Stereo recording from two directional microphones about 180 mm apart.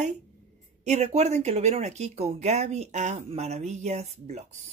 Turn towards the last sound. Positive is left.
turn(degrees=-35)  # may be behind; listen again after turning